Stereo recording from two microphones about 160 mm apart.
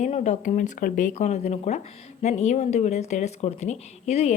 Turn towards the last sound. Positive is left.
turn(degrees=45)  # may be behind; listen again after turning